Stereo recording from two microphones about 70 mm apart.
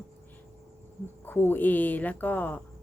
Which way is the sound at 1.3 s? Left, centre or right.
Left.